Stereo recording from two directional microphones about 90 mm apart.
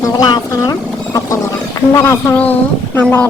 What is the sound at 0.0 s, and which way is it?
Speech, 50° left (ahead or behind).